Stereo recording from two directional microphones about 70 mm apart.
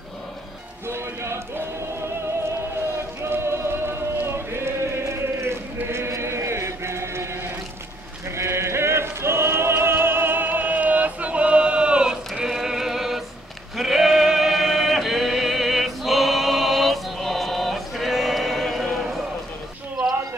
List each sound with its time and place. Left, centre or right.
0.8 s speech: right
3.2 s a sound: right
8.4 s music: right; by 13.2 s centre
13.7 s male singing: centre